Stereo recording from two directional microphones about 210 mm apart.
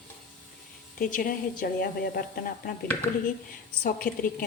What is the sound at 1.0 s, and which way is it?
A woman's voice, 40° left (ahead or behind).